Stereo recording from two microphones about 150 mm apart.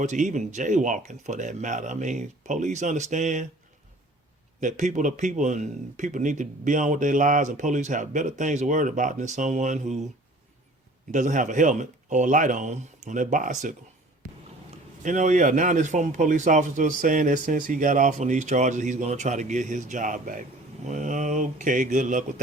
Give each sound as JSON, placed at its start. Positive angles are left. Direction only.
{"t": 0.0, "sound": "speech", "side_deg": -55}
{"t": 4.6, "sound": "a man's voice", "side_deg": -55}
{"t": 11.1, "sound": "a man's voice", "side_deg": -60}
{"t": 15.0, "sound": "a man's voice", "side_deg": -55}